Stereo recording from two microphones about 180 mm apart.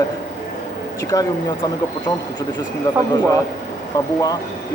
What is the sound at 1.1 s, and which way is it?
Speech, 20° left (ahead or behind).